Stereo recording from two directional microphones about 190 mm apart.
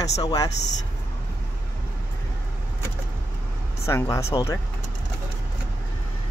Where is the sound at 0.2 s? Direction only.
20° left (ahead or behind).